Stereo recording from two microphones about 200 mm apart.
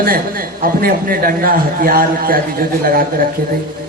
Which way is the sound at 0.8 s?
45° right (ahead or behind).